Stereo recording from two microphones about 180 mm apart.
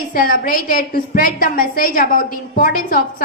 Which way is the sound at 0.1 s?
50° left (ahead or behind).